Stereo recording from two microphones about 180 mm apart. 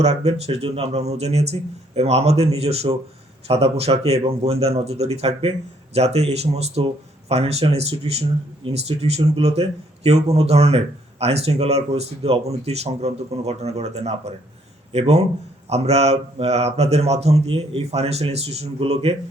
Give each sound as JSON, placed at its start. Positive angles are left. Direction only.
{"t": 0.0, "sound": "speech", "side_deg": -35}